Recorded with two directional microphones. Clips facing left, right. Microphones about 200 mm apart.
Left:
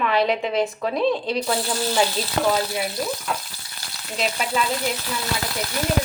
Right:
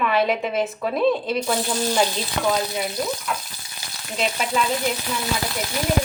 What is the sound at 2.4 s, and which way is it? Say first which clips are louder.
Speech: left 2 dB; 40° left (ahead or behind).